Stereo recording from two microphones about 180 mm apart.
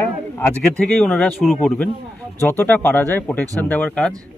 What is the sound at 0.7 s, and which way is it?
Speech, 5° left (ahead or behind).